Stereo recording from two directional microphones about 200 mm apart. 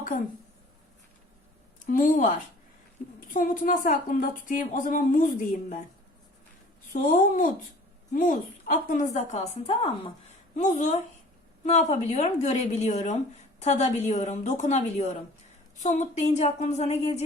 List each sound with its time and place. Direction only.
1.9 s a woman's voice: 45° left (ahead or behind)
6.9 s a woman's voice: 45° left (ahead or behind)